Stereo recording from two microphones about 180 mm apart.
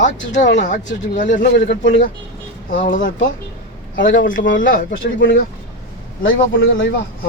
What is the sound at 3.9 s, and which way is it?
Speech, 90° left.